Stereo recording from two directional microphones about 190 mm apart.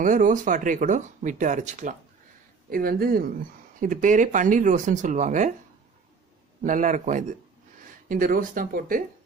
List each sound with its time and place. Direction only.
0.0 s speech: 45° right (ahead or behind)
2.7 s speech: 50° right (ahead or behind)
6.6 s speech: 40° right (ahead or behind)